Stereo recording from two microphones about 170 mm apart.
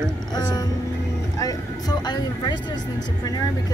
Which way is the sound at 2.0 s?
25° left (ahead or behind).